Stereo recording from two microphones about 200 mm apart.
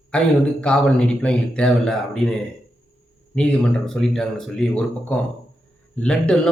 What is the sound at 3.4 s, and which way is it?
A man's voice, 5° left (ahead or behind).